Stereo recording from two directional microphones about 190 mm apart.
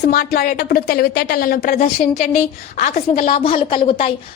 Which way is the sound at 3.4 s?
30° left (ahead or behind).